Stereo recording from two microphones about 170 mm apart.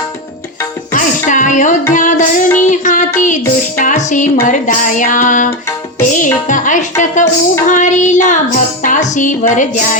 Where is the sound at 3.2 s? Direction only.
50° left (ahead or behind).